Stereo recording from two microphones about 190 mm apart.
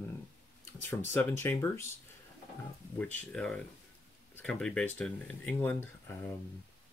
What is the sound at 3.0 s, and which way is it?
Speech, 5° left (ahead or behind).